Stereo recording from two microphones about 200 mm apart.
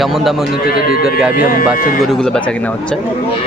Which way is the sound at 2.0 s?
5° left (ahead or behind).